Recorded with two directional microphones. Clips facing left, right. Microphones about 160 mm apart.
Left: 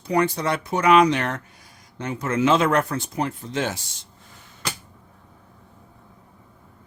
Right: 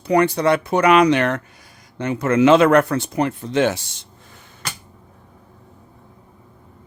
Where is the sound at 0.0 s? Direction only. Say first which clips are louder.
Right 5 dB; 70° right (ahead or behind).